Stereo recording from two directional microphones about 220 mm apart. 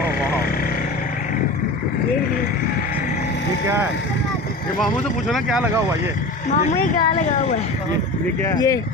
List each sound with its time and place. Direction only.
5.3 s speech: centre (ahead or behind)
6.5 s speech: 35° left (ahead or behind)
8.5 s speech: 15° left (ahead or behind)